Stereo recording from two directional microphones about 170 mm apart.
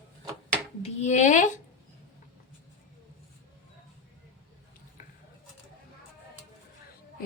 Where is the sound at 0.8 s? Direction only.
45° left (ahead or behind).